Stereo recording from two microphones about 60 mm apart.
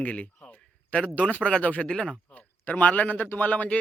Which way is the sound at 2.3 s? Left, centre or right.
Left.